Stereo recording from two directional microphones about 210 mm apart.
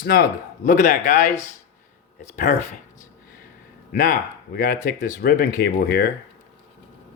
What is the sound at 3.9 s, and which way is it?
Speech, 40° left (ahead or behind).